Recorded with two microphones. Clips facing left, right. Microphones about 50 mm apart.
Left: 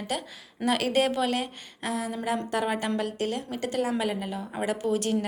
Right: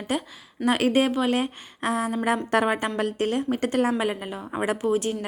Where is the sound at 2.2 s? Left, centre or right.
Right.